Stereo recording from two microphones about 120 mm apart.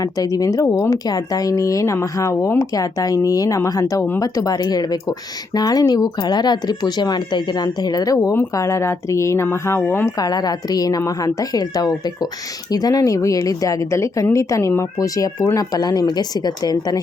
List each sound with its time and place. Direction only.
0.0 s a woman's voice: 30° left (ahead or behind)
10.2 s a woman's voice: 35° left (ahead or behind)